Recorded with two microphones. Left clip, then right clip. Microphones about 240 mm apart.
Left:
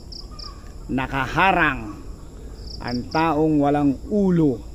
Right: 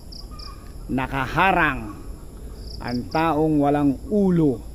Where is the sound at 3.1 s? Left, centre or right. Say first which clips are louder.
Left 1 dB; centre.